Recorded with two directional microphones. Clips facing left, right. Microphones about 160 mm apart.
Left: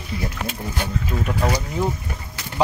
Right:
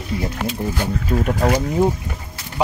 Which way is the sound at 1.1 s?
25° right (ahead or behind).